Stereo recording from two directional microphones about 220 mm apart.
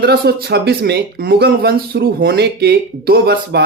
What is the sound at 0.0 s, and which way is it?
Speech, 45° right (ahead or behind).